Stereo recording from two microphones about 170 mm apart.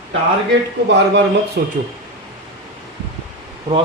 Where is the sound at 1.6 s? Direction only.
70° right (ahead or behind).